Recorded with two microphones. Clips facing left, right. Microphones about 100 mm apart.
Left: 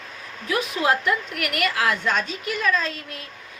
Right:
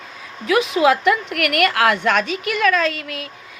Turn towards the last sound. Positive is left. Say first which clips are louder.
# right 6 dB
turn(degrees=-80)